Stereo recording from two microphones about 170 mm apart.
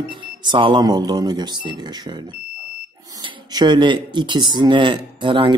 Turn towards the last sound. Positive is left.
turn(degrees=-30)  # may be behind; listen again after turning